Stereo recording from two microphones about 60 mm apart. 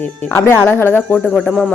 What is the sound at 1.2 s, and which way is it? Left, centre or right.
Speech, centre.